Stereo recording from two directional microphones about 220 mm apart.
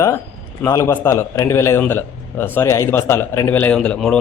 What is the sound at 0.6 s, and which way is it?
A man's voice, 10° left (ahead or behind).